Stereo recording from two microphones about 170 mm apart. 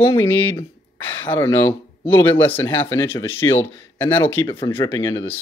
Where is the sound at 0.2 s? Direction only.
10° left (ahead or behind).